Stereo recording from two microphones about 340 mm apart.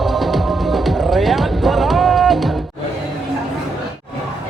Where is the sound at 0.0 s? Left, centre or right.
Centre.